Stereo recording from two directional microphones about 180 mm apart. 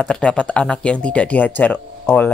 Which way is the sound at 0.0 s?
5° left (ahead or behind).